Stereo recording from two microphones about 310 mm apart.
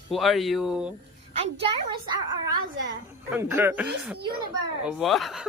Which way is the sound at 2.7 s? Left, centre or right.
Right.